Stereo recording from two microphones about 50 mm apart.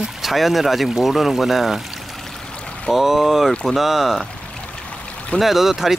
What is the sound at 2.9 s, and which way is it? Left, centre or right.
Speech, centre.